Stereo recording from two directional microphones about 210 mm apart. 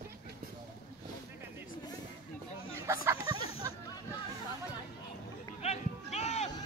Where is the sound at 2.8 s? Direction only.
15° right (ahead or behind).